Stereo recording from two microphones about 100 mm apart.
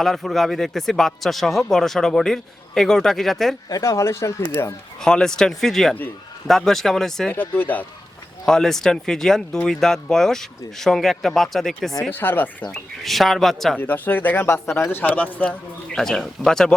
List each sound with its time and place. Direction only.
0.0 s speech: centre (ahead or behind)
3.7 s speech: 35° left (ahead or behind)
4.9 s speech: 5° left (ahead or behind)
7.3 s speech: 20° left (ahead or behind)
8.4 s speech: 5° left (ahead or behind)
12.1 s speech: 20° left (ahead or behind)
12.7 s speech: centre (ahead or behind)
13.7 s a man's voice: 15° left (ahead or behind)